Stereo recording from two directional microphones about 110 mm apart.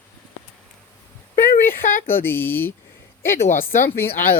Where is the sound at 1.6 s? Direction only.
20° left (ahead or behind).